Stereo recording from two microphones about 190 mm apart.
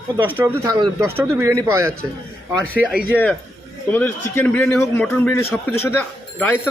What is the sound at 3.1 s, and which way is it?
Speech, 5° right (ahead or behind).